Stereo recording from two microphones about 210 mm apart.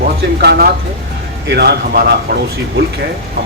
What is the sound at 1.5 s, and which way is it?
Speech, 50° right (ahead or behind).